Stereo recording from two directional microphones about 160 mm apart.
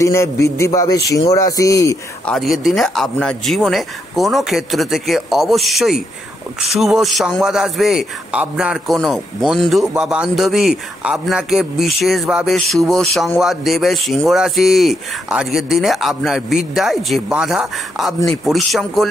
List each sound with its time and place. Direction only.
0.0 s a man's voice: 20° left (ahead or behind)
2.2 s speech: centre (ahead or behind)